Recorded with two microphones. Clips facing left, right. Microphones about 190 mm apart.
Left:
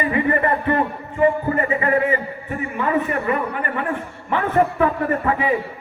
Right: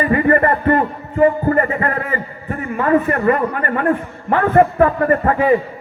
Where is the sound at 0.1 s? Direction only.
55° right (ahead or behind).